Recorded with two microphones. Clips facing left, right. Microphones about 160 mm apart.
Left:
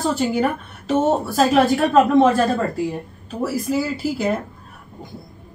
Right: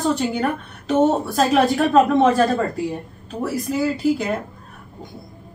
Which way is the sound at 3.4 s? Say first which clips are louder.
Left 1 dB; centre (ahead or behind).